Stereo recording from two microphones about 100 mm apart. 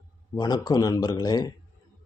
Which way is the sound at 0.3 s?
45° left (ahead or behind).